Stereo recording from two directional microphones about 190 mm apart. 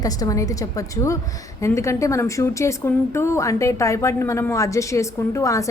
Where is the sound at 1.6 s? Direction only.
15° left (ahead or behind).